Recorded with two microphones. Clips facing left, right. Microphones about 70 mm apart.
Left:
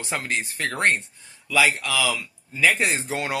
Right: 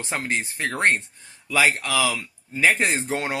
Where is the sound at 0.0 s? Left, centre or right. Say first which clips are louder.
Right 1 dB; right.